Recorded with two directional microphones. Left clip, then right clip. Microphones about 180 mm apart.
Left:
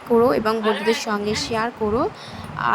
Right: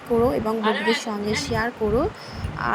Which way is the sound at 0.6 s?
5° right (ahead or behind).